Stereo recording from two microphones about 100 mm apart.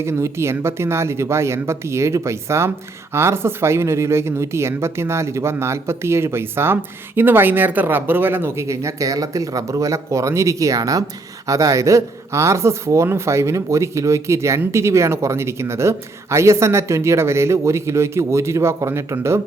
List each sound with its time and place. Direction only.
0.0 s speech: 25° right (ahead or behind)